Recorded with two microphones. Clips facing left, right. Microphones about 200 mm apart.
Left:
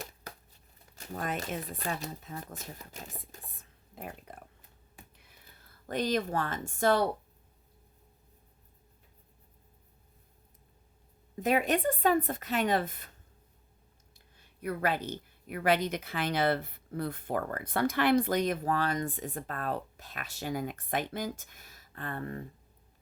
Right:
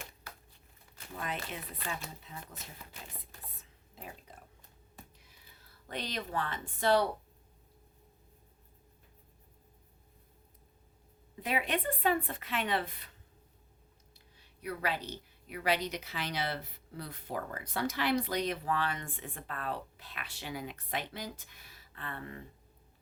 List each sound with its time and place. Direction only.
0.9 s a woman's voice: 45° left (ahead or behind)
3.6 s a sound: 50° left (ahead or behind)
5.1 s whispering: 55° left (ahead or behind)
5.9 s a woman's voice: 45° left (ahead or behind)
11.3 s a woman's voice: 45° left (ahead or behind)
14.3 s a woman's voice: 50° left (ahead or behind)